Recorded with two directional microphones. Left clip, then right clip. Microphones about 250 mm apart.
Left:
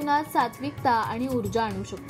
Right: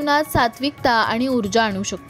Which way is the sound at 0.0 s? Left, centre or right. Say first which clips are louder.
Right 6 dB; right.